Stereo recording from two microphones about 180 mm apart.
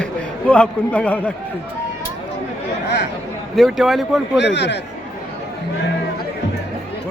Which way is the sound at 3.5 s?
Centre (ahead or behind).